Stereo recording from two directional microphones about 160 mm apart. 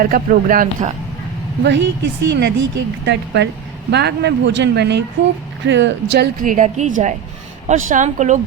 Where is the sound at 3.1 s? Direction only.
90° right.